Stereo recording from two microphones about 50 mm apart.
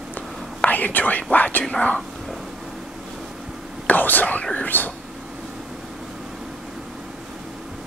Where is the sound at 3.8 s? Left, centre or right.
Left.